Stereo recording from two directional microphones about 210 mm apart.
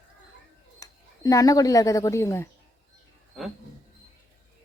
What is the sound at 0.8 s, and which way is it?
Speech, 15° left (ahead or behind).